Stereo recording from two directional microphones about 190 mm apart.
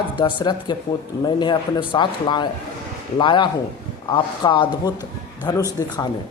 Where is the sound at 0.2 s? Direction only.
25° left (ahead or behind).